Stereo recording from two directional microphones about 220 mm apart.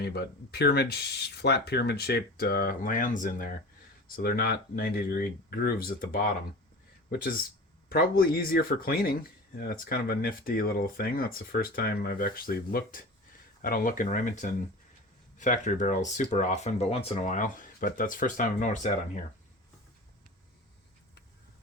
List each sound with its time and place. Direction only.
0.0 s speech: 50° left (ahead or behind); by 19.2 s 35° left (ahead or behind)